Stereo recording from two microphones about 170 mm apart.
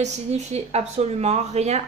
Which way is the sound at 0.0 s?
40° right (ahead or behind).